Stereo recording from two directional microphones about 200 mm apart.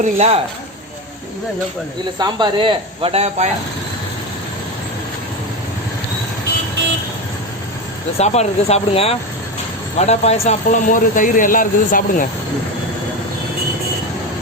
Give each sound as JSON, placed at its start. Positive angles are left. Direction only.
{"t": 0.0, "sound": "speech", "side_deg": -30}
{"t": 2.1, "sound": "speech", "side_deg": -20}
{"t": 8.2, "sound": "speech", "side_deg": 35}